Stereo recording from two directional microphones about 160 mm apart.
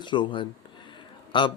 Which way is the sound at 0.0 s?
30° left (ahead or behind).